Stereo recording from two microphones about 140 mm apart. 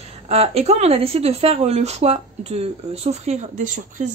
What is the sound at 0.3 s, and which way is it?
Speech, 45° right (ahead or behind).